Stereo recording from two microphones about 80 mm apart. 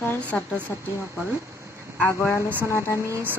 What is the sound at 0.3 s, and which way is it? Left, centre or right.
Speech, centre.